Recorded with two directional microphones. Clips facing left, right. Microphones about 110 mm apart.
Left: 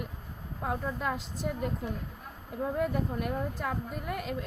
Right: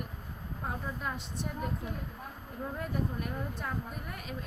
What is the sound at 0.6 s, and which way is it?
Speech, 90° left.